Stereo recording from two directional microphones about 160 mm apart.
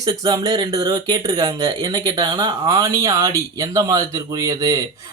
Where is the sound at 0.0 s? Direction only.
25° right (ahead or behind).